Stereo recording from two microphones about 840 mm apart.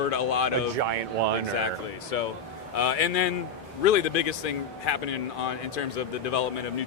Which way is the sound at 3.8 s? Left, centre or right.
Left.